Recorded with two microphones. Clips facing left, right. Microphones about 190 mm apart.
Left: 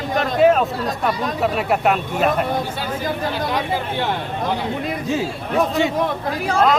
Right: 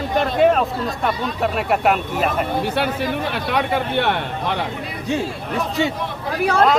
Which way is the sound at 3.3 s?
65° right (ahead or behind).